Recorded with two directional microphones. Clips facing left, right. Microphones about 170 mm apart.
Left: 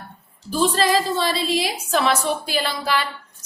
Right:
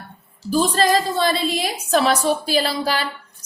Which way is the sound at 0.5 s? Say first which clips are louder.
Right 1 dB; 40° right (ahead or behind).